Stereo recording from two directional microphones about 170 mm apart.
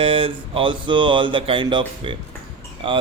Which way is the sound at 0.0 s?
30° right (ahead or behind).